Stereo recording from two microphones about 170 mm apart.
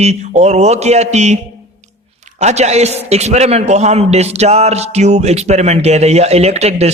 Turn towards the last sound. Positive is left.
turn(degrees=-40)  # may be behind; listen again after turning